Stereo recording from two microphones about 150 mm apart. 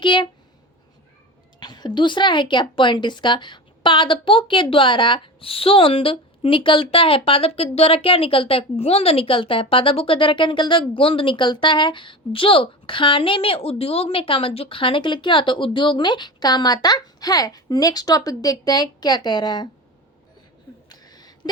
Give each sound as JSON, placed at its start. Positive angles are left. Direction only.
{"t": 0.0, "sound": "speech", "side_deg": 30}
{"t": 1.5, "sound": "a woman's voice", "side_deg": 30}
{"t": 20.9, "sound": "a sound", "side_deg": 25}